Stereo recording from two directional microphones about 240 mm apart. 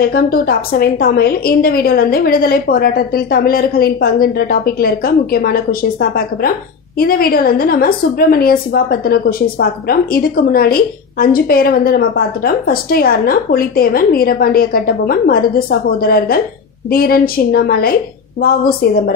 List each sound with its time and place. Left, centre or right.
0.0 s a woman's voice: left